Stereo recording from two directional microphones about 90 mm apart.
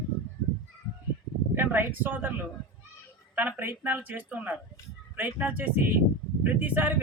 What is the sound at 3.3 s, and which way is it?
Speech, 20° right (ahead or behind).